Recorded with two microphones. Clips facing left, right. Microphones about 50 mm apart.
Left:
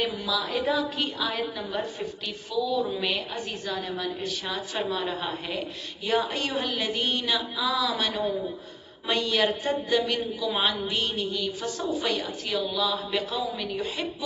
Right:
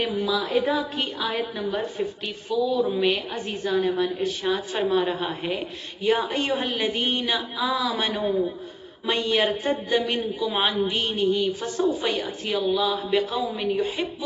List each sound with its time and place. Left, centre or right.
0.4 s a woman's voice: centre
13.7 s a woman's voice: right